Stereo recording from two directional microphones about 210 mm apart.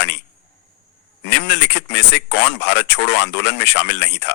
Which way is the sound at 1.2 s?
55° left (ahead or behind).